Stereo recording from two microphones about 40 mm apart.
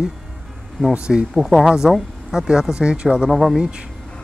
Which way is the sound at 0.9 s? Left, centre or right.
Right.